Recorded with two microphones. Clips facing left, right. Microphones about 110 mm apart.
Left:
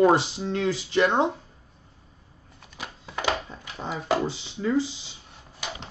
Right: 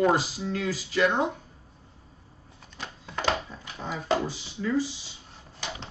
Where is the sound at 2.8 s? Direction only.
5° left (ahead or behind).